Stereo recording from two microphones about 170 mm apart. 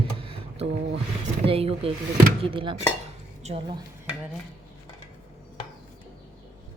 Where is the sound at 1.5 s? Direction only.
35° right (ahead or behind).